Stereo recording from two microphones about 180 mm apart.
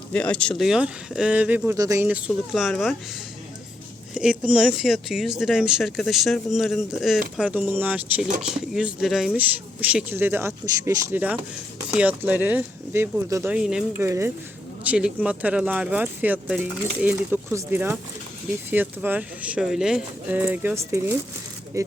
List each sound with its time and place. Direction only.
0.1 s speech: 5° left (ahead or behind)
4.1 s speech: 5° right (ahead or behind)
14.1 s speech: 15° right (ahead or behind)